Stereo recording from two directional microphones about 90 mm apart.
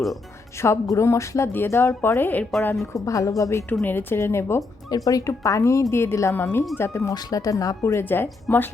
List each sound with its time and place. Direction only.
0.6 s a woman's voice: 30° left (ahead or behind)
2.4 s a woman's voice: 5° left (ahead or behind)
2.9 s a woman's voice: 40° left (ahead or behind)
3.8 s a woman's voice: 25° left (ahead or behind)
4.9 s a woman's voice: 40° left (ahead or behind)
7.1 s a woman's voice: 40° left (ahead or behind)
8.1 s a woman's voice: 25° left (ahead or behind)